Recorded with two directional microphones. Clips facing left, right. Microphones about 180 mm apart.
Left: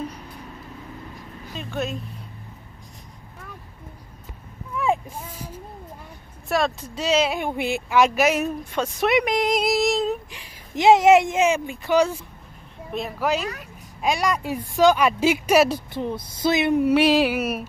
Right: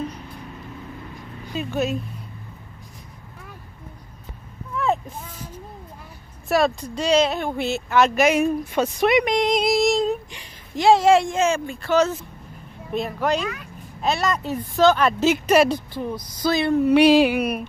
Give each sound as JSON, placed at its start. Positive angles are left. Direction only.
{"t": 1.5, "sound": "speech", "side_deg": -5}
{"t": 4.7, "sound": "vehicle", "side_deg": 10}
{"t": 6.5, "sound": "speech", "side_deg": 0}
{"t": 10.8, "sound": "speech", "side_deg": 20}
{"t": 12.9, "sound": "speech", "side_deg": 0}
{"t": 15.9, "sound": "speech", "side_deg": 20}
{"t": 16.9, "sound": "speech", "side_deg": 0}